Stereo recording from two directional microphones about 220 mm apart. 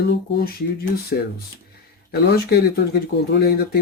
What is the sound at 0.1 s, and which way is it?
Speech, 45° left (ahead or behind).